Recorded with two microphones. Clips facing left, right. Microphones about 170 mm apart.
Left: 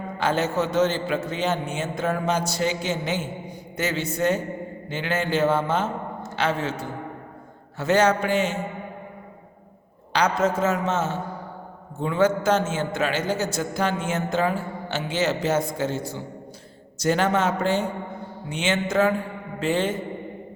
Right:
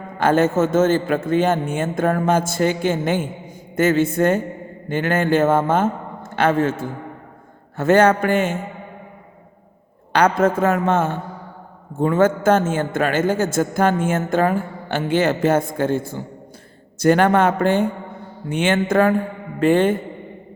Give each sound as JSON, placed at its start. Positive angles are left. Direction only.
{"t": 0.2, "sound": "a man's voice", "side_deg": -50}
{"t": 10.1, "sound": "a woman's voice", "side_deg": -55}